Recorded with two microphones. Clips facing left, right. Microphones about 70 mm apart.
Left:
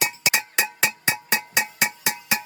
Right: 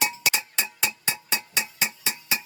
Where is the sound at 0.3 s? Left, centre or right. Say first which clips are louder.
Left 6 dB; left.